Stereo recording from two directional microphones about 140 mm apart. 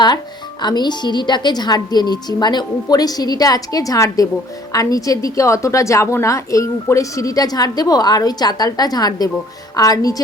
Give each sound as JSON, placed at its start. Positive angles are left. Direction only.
{"t": 0.6, "sound": "a woman's voice", "side_deg": 30}